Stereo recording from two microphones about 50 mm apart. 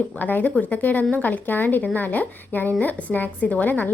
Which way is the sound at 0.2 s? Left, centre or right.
Left.